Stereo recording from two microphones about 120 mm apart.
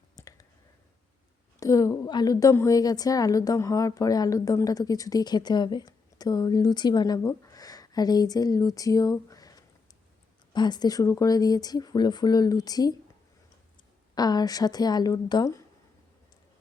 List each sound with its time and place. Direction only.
0.2 s a sound: 30° left (ahead or behind)
1.5 s a woman's voice: 30° left (ahead or behind)
14.2 s a woman's voice: 35° left (ahead or behind)